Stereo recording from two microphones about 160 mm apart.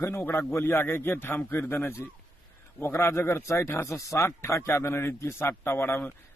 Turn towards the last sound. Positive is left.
turn(degrees=15)  # may be behind; listen again after turning